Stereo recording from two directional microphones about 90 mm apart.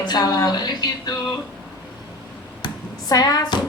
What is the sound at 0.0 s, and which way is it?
A woman's voice, 50° left (ahead or behind).